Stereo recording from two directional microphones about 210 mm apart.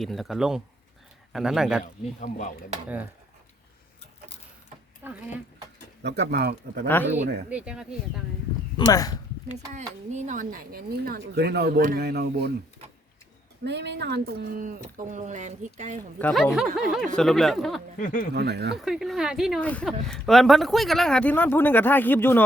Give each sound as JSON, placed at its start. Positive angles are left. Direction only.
{"t": 0.0, "sound": "speech", "side_deg": 0}
{"t": 1.8, "sound": "speech", "side_deg": 40}
{"t": 5.0, "sound": "speech", "side_deg": -10}
{"t": 6.0, "sound": "speech", "side_deg": -55}
{"t": 6.8, "sound": "speech", "side_deg": 10}
{"t": 7.5, "sound": "speech", "side_deg": -5}
{"t": 8.8, "sound": "speech", "side_deg": 15}
{"t": 9.7, "sound": "speech", "side_deg": -35}
{"t": 13.7, "sound": "a woman's voice", "side_deg": -55}
{"t": 16.1, "sound": "speech", "side_deg": 5}
{"t": 17.9, "sound": "speech", "side_deg": 40}
{"t": 18.3, "sound": "speech", "side_deg": -50}
{"t": 18.8, "sound": "speech", "side_deg": 0}